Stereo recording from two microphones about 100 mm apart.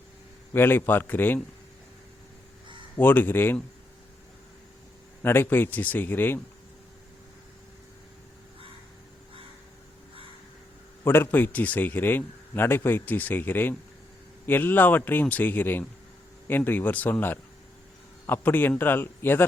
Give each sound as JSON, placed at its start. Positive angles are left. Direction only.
{"t": 0.5, "sound": "speech", "side_deg": 20}
{"t": 3.0, "sound": "speech", "side_deg": 20}
{"t": 5.2, "sound": "speech", "side_deg": 25}
{"t": 11.0, "sound": "speech", "side_deg": 20}